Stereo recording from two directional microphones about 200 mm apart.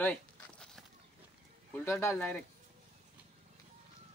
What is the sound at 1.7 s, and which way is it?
Speech, 10° left (ahead or behind).